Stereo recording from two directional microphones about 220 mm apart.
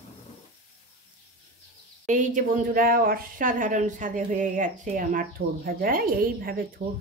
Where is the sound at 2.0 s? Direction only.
35° right (ahead or behind).